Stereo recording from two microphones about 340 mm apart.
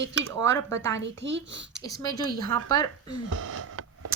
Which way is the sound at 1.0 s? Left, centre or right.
Right.